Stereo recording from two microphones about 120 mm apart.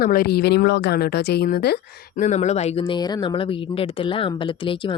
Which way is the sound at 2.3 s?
70° left (ahead or behind).